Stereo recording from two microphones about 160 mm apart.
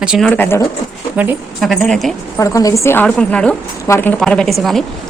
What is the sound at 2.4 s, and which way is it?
A woman's voice, 20° left (ahead or behind).